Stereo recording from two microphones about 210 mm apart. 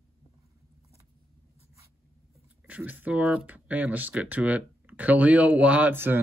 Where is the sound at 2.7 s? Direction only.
10° right (ahead or behind).